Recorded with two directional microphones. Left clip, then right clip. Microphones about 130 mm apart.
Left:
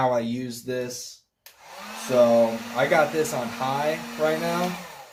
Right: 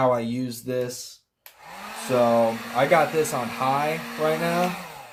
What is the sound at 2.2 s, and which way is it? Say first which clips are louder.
Speech: left 2 dB; 45° right (ahead or behind).